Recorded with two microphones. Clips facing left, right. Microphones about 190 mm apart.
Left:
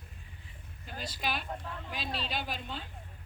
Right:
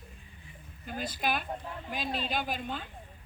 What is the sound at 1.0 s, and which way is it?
Speech, 50° right (ahead or behind).